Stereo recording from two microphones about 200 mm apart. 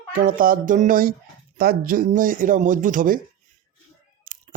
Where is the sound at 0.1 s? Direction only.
45° right (ahead or behind).